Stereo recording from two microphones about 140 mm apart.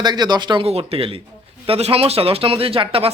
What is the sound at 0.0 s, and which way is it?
Speech, 30° right (ahead or behind).